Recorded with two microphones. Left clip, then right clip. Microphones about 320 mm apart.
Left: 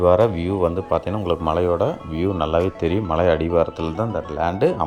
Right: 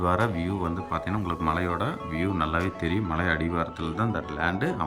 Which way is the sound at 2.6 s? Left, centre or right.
Centre.